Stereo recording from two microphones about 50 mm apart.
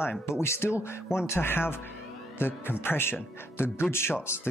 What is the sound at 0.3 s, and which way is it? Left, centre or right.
Speech, left.